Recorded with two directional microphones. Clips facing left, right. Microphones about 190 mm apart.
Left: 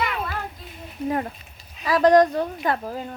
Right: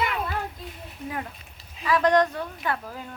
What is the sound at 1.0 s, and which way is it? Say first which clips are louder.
A woman's voice: left 8 dB; 40° left (ahead or behind).